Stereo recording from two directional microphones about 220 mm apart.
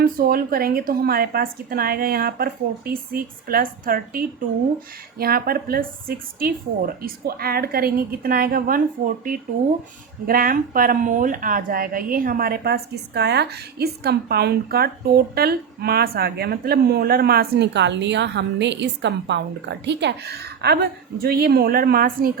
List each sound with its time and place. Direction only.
0.0 s a woman's voice: 40° right (ahead or behind)